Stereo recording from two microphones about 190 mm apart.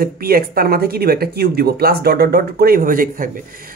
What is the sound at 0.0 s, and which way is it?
Speech, 50° right (ahead or behind).